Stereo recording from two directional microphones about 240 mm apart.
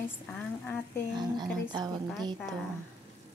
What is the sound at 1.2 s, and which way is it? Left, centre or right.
Speech, centre.